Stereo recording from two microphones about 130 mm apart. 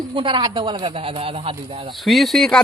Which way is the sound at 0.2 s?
40° right (ahead or behind).